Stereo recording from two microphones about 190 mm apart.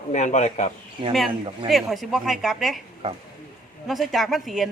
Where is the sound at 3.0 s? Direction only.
30° right (ahead or behind).